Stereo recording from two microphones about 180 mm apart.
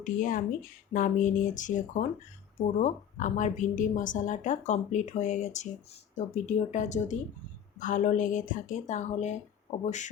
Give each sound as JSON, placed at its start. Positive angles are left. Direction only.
{"t": 0.0, "sound": "a woman's voice", "side_deg": 50}